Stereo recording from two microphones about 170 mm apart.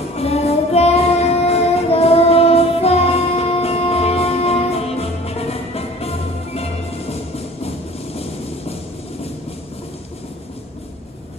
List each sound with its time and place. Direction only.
0.2 s child singing: 35° left (ahead or behind)